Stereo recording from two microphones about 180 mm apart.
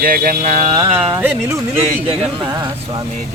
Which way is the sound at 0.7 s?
30° right (ahead or behind).